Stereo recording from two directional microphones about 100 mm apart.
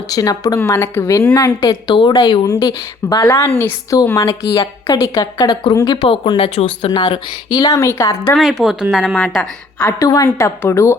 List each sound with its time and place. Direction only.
0.1 s a woman's voice: 40° left (ahead or behind)
0.6 s a woman's voice: 25° left (ahead or behind)
1.4 s a woman's voice: 40° left (ahead or behind)
2.4 s a woman's voice: 40° left (ahead or behind)
6.0 s speech: 60° left (ahead or behind)
6.9 s a woman's voice: 50° left (ahead or behind)
7.7 s a woman's voice: 30° left (ahead or behind)
8.4 s a woman's voice: centre (ahead or behind)
9.8 s a woman's voice: 35° left (ahead or behind)